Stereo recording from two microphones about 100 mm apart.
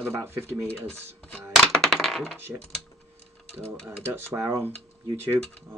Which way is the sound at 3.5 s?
25° right (ahead or behind).